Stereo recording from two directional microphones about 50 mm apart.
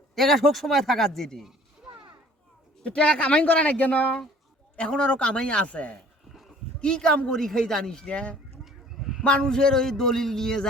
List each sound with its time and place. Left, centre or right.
0.2 s speech: centre
2.8 s speech: left
8.1 s speech: left
8.6 s chicken: centre
9.2 s speech: left